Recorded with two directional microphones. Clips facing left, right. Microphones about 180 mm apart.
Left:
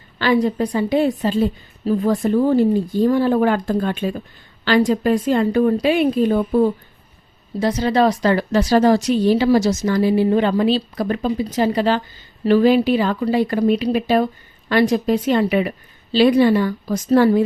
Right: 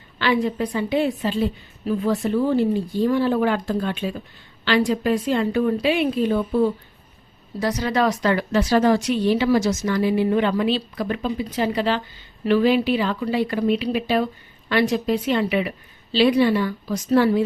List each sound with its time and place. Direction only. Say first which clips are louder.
0.2 s a woman's voice: left 4 dB; 40° left (ahead or behind)
7.6 s a woman's voice: left 4 dB; 30° left (ahead or behind); by 17.4 s 45° left (ahead or behind)